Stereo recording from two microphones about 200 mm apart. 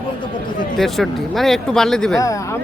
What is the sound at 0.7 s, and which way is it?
Speech, centre (ahead or behind).